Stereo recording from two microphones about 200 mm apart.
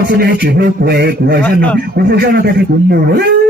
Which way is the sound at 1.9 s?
55° right (ahead or behind).